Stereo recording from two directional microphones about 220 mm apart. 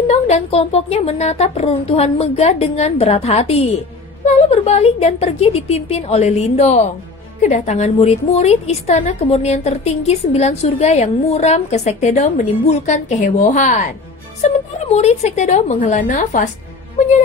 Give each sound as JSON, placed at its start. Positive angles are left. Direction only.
{"t": 0.1, "sound": "a woman's voice", "side_deg": 30}